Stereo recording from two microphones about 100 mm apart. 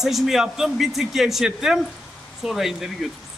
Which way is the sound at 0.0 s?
Centre (ahead or behind).